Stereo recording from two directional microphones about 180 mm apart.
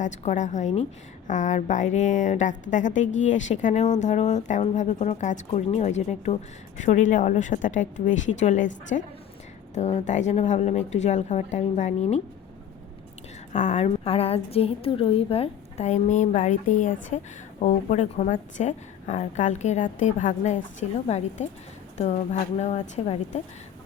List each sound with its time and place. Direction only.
0.0 s a woman's voice: 40° left (ahead or behind)
13.5 s a woman's voice: 40° left (ahead or behind)